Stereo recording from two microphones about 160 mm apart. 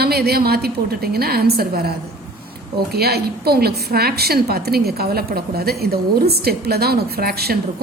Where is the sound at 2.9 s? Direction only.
80° right.